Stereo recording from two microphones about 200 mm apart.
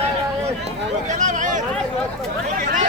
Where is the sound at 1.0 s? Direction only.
35° right (ahead or behind).